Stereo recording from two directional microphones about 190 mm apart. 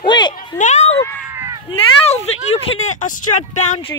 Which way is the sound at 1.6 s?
30° left (ahead or behind).